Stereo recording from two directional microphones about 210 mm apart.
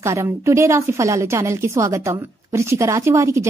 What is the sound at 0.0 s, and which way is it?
A woman's voice, 15° right (ahead or behind).